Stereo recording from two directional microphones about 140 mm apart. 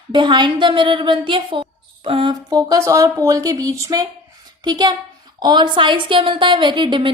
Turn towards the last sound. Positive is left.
turn(degrees=-35)  # may be behind; listen again after turning